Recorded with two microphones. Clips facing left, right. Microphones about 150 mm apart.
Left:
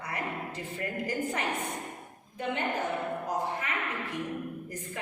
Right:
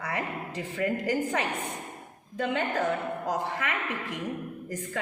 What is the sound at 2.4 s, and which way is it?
Speech, 90° right.